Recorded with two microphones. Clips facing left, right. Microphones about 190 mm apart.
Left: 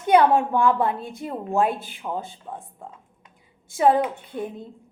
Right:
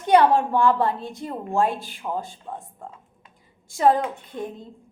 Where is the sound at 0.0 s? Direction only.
Centre (ahead or behind).